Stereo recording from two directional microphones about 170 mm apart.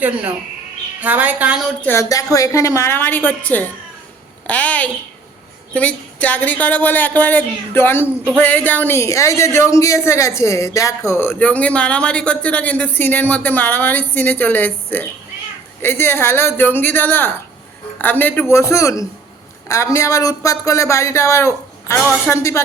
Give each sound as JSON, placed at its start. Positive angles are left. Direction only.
{"t": 1.0, "sound": "a woman's voice", "side_deg": -10}
{"t": 1.8, "sound": "speech", "side_deg": 15}